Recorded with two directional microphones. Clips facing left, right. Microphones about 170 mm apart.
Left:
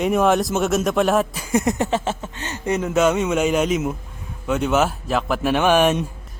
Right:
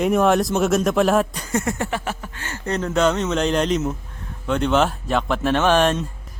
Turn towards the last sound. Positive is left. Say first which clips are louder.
# left 1 dB
turn(degrees=10)  # may be behind; listen again after turning